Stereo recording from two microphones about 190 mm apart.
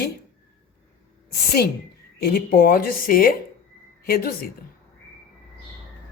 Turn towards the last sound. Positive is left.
turn(degrees=50)  # may be behind; listen again after turning